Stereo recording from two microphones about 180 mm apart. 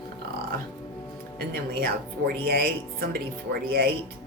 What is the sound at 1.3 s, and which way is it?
Speech, 55° right (ahead or behind).